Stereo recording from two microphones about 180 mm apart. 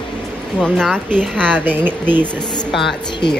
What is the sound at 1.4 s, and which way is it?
Speech, 10° right (ahead or behind).